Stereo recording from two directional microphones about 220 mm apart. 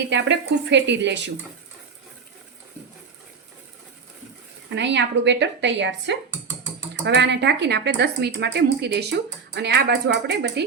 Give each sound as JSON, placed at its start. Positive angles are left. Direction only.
{"t": 0.1, "sound": "speech", "side_deg": -55}
{"t": 4.7, "sound": "speech", "side_deg": -55}